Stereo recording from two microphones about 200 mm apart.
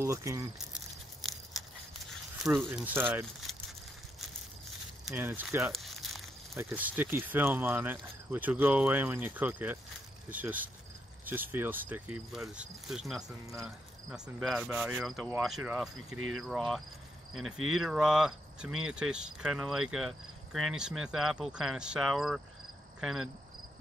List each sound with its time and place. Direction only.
0.0 s speech: 15° right (ahead or behind)
2.4 s speech: 5° right (ahead or behind)
3.5 s keys jangling: centre (ahead or behind)
5.0 s a sound: 10° right (ahead or behind)
6.5 s speech: 10° right (ahead or behind)
16.2 s cricket: 90° right
16.4 s speech: centre (ahead or behind)
22.9 s cricket: centre (ahead or behind)